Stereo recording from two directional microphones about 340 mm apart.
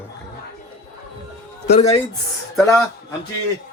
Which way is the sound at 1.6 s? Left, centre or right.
Centre.